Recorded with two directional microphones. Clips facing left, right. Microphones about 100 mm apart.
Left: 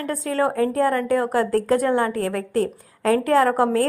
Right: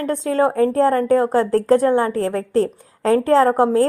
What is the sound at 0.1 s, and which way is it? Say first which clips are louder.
A woman's voice: right 4 dB; 25° right (ahead or behind).